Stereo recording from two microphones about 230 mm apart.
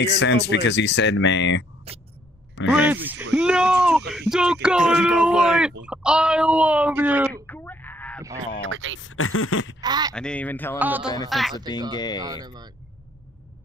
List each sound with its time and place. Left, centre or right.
0.0 s speech: left
2.6 s speech: centre
7.4 s bleat: centre
8.6 s speech: right
9.0 s speech: left
9.8 s speech: centre
10.1 s speech: centre
10.8 s speech: centre
12.2 s speech: centre